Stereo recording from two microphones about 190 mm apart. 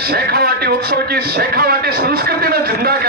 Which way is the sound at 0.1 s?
55° right (ahead or behind).